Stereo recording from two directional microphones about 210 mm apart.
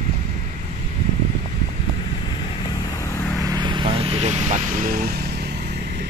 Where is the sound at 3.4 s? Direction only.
20° right (ahead or behind); by 5.4 s 45° right (ahead or behind).